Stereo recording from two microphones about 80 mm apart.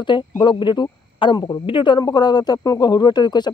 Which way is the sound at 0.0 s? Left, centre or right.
Left.